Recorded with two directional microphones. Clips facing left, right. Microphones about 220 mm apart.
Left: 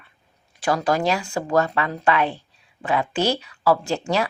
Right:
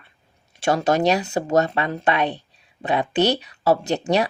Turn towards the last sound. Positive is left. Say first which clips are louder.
# right 2 dB
turn(degrees=-20)  # may be behind; listen again after turning